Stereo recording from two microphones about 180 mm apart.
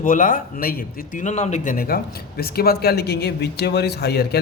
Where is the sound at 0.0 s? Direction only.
45° left (ahead or behind).